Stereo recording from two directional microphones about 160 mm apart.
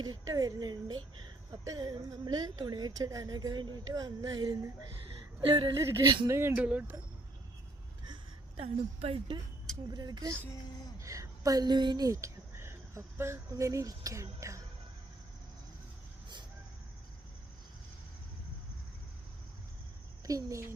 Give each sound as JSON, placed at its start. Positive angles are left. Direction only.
{"t": 0.0, "sound": "speech", "side_deg": -25}
{"t": 5.8, "sound": "speech", "side_deg": -20}
{"t": 8.0, "sound": "a sound", "side_deg": -35}
{"t": 9.9, "sound": "speech", "side_deg": -25}
{"t": 20.2, "sound": "speech", "side_deg": -20}